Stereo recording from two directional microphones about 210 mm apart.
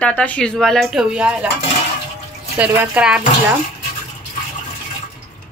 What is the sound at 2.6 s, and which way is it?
Speech, 5° right (ahead or behind).